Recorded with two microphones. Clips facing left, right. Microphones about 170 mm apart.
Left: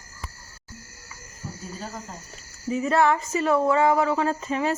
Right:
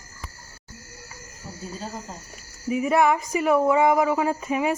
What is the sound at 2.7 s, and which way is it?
A woman's voice, 15° right (ahead or behind).